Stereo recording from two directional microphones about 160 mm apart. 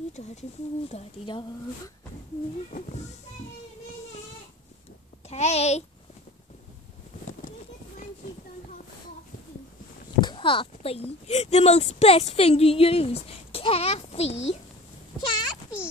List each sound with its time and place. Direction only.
0.1 s speech: 45° left (ahead or behind)
5.3 s a child's voice: 40° left (ahead or behind)
10.2 s speech: 30° left (ahead or behind)
15.1 s a sound: 25° left (ahead or behind)